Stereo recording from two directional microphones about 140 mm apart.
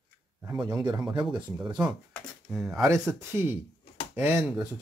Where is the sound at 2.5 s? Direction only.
5° right (ahead or behind).